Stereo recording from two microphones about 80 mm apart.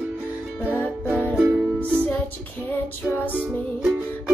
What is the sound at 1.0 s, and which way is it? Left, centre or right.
Music, centre.